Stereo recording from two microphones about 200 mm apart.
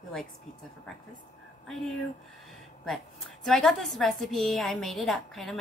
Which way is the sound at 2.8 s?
Centre (ahead or behind).